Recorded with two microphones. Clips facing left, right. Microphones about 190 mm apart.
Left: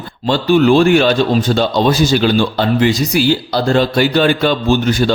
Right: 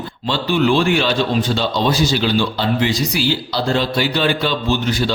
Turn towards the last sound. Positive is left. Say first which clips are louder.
# left 5 dB
turn(degrees=50)  # may be behind; listen again after turning